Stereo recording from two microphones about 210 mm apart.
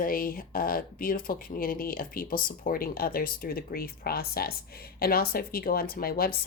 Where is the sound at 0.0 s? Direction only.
45° left (ahead or behind).